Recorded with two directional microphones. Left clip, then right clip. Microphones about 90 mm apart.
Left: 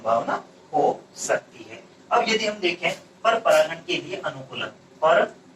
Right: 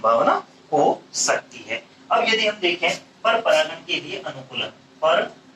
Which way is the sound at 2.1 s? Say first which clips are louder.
Right 3 dB; 30° right (ahead or behind).